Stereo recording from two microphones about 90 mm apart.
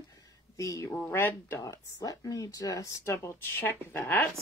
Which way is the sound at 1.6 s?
40° left (ahead or behind).